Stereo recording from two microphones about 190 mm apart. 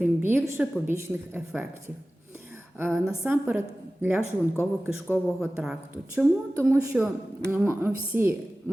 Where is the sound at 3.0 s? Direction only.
5° right (ahead or behind).